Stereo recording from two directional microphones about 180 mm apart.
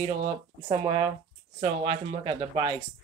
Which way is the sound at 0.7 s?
30° right (ahead or behind).